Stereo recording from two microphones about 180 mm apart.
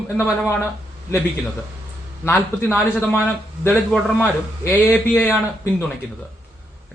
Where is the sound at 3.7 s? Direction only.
5° left (ahead or behind).